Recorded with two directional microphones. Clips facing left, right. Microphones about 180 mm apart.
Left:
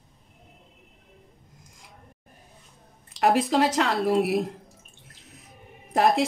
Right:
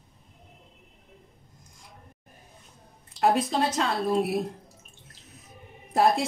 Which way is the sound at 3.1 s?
85° left.